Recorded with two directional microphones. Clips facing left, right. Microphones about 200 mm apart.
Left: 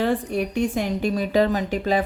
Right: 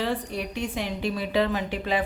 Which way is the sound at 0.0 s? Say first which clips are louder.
Left 6 dB; 50° left (ahead or behind).